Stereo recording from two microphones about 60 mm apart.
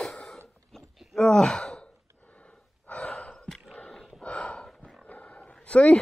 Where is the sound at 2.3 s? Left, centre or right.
Left.